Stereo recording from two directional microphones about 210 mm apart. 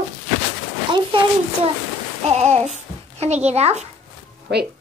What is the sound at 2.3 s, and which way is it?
A child's voice, 30° right (ahead or behind).